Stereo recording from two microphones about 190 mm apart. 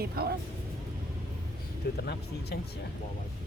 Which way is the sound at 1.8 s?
60° left (ahead or behind).